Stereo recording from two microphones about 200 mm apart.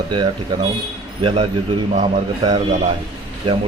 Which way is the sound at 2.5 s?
35° right (ahead or behind).